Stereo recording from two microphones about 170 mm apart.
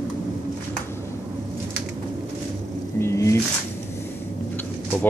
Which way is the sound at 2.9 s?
15° left (ahead or behind).